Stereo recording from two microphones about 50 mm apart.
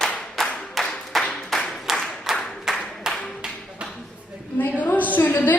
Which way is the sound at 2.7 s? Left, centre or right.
Centre.